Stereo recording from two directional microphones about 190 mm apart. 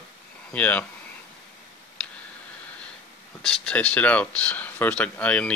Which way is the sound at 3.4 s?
5° left (ahead or behind).